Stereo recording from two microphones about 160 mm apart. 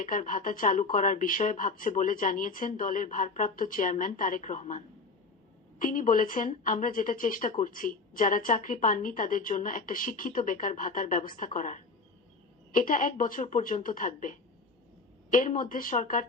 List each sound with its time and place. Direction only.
0.0 s speech: 55° left (ahead or behind)
5.8 s speech: 55° left (ahead or behind)